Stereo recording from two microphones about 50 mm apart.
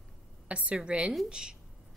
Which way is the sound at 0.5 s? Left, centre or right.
Right.